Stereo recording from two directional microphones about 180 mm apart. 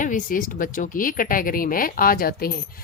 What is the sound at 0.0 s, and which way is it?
A woman's voice, 50° left (ahead or behind).